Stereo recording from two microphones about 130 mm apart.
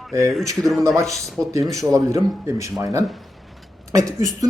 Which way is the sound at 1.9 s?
25° right (ahead or behind).